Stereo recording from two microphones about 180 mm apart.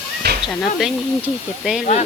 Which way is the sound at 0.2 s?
65° right (ahead or behind).